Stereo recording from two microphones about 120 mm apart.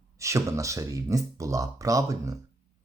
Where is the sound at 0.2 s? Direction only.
25° right (ahead or behind).